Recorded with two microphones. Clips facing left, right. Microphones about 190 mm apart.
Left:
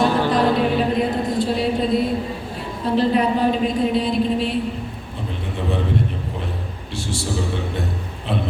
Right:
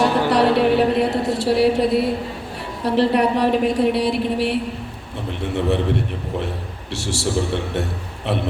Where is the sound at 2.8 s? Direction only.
70° right (ahead or behind).